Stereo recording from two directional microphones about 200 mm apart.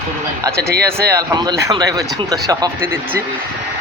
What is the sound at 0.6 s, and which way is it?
Speech, 50° right (ahead or behind).